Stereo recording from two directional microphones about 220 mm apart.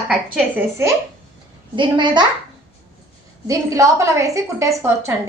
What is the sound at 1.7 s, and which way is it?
Speech, 20° right (ahead or behind).